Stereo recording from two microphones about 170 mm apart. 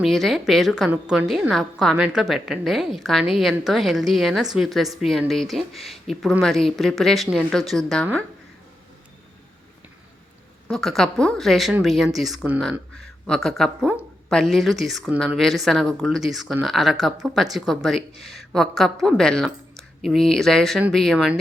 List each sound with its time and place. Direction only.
0.0 s a woman's voice: centre (ahead or behind)
10.7 s a woman's voice: centre (ahead or behind)